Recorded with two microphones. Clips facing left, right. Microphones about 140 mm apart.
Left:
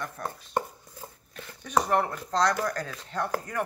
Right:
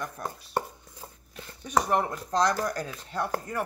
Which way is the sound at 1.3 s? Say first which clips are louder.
Even; 10° right (ahead or behind).